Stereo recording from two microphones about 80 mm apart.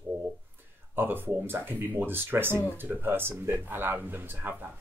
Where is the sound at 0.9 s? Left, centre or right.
Right.